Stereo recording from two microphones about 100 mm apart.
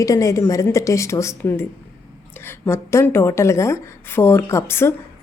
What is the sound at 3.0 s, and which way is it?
A woman's voice, 25° left (ahead or behind).